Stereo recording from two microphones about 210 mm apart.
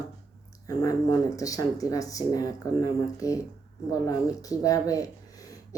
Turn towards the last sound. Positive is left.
turn(degrees=15)  # may be behind; listen again after turning